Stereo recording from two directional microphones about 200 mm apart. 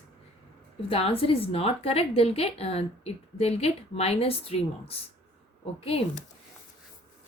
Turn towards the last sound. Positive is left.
turn(degrees=30)  # may be behind; listen again after turning